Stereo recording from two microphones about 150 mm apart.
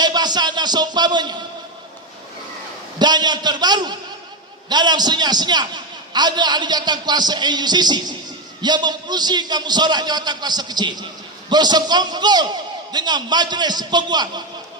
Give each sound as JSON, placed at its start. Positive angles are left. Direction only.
{"t": 0.0, "sound": "a man's voice", "side_deg": -30}
{"t": 3.0, "sound": "a man's voice", "side_deg": -30}